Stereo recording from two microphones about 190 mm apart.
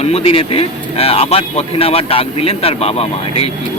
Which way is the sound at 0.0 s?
30° left (ahead or behind).